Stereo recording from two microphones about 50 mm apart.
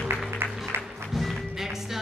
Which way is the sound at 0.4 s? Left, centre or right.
Right.